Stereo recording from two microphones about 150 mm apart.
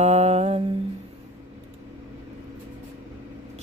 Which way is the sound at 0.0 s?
50° right (ahead or behind).